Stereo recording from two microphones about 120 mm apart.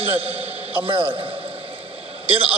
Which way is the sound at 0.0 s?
50° right (ahead or behind).